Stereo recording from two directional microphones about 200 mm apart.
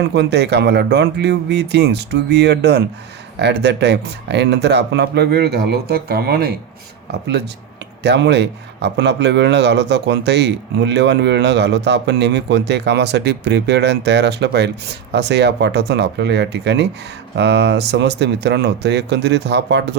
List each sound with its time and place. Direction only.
0.0 s speech: 55° right (ahead or behind)